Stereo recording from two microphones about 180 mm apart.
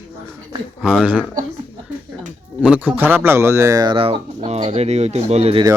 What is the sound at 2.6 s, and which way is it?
Speech, 5° right (ahead or behind).